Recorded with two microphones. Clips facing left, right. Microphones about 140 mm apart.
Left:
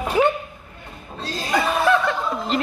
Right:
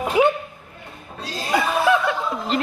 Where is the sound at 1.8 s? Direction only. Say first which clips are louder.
Even; 10° right (ahead or behind).